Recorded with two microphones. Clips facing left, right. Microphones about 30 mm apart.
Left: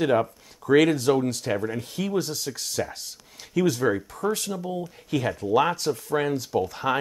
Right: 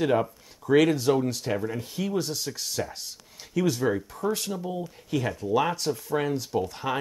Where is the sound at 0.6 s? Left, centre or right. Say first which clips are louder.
Left 2 dB; left.